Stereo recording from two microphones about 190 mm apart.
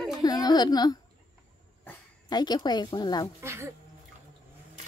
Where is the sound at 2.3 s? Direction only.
20° left (ahead or behind).